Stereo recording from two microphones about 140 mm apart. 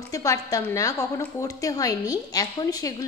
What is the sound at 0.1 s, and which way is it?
A woman's voice, 25° left (ahead or behind).